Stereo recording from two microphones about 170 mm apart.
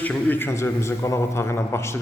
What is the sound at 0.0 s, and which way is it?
Speech, 10° left (ahead or behind).